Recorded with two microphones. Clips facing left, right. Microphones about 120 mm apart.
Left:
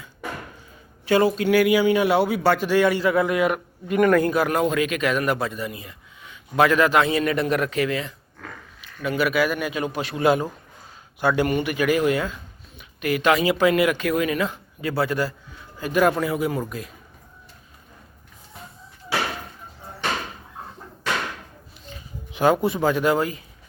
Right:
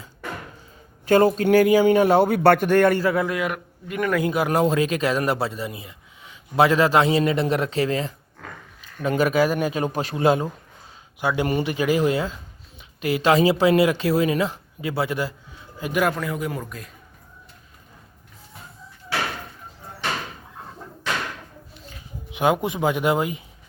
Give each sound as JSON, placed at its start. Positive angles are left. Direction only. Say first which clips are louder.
{"t": 1.0, "sound": "a man's voice", "louder": "right 2 dB", "side_deg": -45}
{"t": 3.2, "sound": "a man's voice", "louder": "left 3 dB", "side_deg": 20}
{"t": 3.9, "sound": "a man's voice", "louder": "left 5 dB", "side_deg": 45}
{"t": 4.3, "sound": "speech", "louder": "right 1 dB", "side_deg": -20}
{"t": 11.2, "sound": "speech", "louder": "left 3 dB", "side_deg": -15}
{"t": 11.4, "sound": "speech", "louder": "even", "side_deg": -30}
{"t": 16.1, "sound": "a man's voice", "louder": "left 4 dB", "side_deg": 5}
{"t": 22.3, "sound": "speech", "louder": "left 2 dB", "side_deg": -15}